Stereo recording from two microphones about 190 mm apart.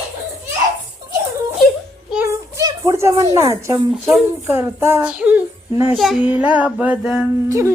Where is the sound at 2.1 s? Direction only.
10° right (ahead or behind).